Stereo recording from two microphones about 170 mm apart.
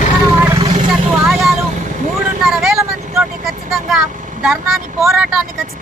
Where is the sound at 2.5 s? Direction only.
Centre (ahead or behind).